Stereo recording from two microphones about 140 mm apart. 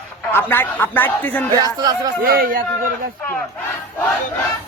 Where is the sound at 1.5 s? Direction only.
25° right (ahead or behind).